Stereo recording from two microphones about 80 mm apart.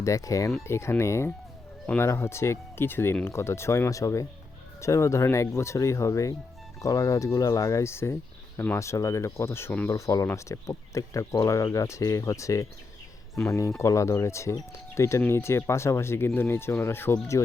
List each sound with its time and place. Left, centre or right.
0.0 s speech: left
9.9 s speech: left
13.7 s speech: left